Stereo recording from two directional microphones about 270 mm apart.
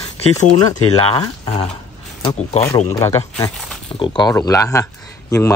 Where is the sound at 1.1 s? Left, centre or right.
Centre.